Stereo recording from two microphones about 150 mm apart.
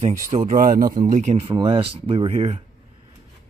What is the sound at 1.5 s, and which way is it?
Speech, 35° right (ahead or behind).